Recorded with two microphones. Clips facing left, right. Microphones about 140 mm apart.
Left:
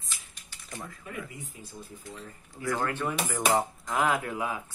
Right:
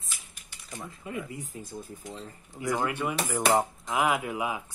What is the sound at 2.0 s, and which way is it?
Speech, 25° right (ahead or behind).